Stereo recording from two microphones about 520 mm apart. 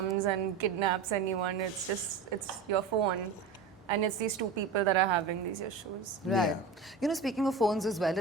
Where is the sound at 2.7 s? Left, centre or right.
Right.